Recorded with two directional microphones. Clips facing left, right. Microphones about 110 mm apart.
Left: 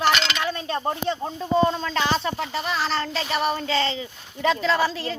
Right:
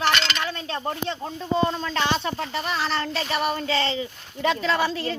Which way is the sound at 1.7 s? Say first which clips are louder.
Left 1 dB; centre (ahead or behind).